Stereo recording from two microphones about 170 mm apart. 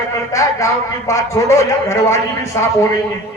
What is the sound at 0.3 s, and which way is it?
A man's voice, 20° left (ahead or behind).